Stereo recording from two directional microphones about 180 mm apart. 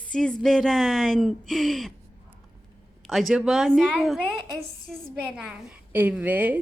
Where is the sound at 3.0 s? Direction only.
Centre (ahead or behind).